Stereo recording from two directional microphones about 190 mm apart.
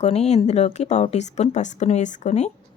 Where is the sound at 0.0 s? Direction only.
35° left (ahead or behind).